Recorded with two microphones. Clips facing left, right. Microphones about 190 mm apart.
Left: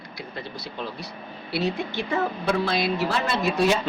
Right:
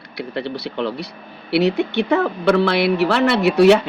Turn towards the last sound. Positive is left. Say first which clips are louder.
# right 10 dB
turn(degrees=-70)  # may be behind; listen again after turning